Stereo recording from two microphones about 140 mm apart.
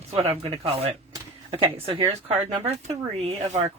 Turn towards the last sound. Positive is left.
turn(degrees=-50)  # may be behind; listen again after turning